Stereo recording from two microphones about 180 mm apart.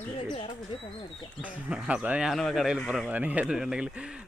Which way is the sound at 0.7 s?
30° left (ahead or behind).